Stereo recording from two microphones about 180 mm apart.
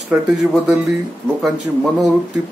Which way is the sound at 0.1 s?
5° right (ahead or behind).